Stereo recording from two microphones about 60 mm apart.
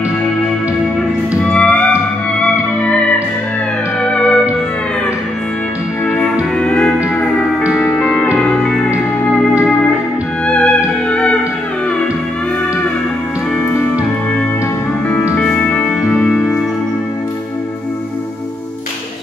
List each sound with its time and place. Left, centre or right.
1.4 s music: centre
4.1 s music: centre
6.6 s music: centre
7.7 s music: centre
8.4 s music: centre
10.4 s music: centre
15.3 s music: centre